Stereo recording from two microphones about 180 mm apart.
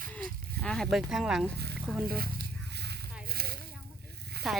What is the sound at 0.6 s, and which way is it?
Speech, 5° left (ahead or behind).